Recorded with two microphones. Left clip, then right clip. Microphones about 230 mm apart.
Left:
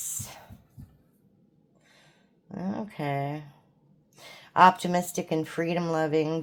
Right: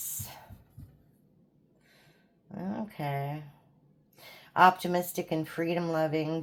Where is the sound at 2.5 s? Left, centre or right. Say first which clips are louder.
Left 3 dB; left.